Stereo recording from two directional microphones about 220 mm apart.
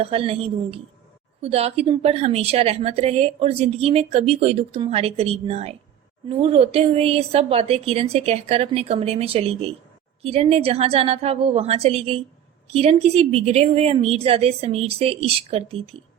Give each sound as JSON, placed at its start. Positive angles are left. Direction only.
{"t": 0.0, "sound": "a woman's voice", "side_deg": -25}